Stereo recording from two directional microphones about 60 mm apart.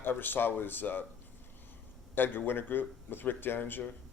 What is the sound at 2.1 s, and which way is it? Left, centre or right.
A man's voice, left.